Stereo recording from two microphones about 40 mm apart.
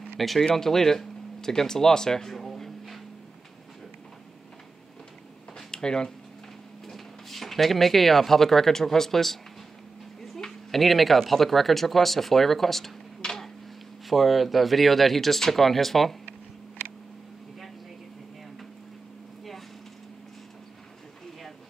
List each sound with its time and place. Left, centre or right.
0.2 s speech: centre
5.7 s speech: centre
6.9 s speech: centre
10.7 s speech: centre